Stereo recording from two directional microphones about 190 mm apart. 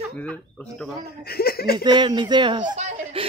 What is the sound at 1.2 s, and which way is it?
Speech, 55° left (ahead or behind).